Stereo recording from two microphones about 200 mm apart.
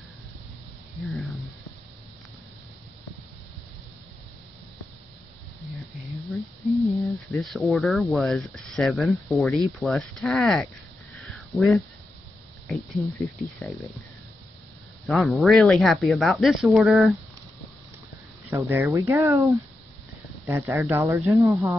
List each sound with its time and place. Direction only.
6.9 s speech: centre (ahead or behind)
11.1 s a sound: centre (ahead or behind)
13.0 s speech: 15° right (ahead or behind)
15.0 s speech: centre (ahead or behind)
18.5 s speech: 10° right (ahead or behind)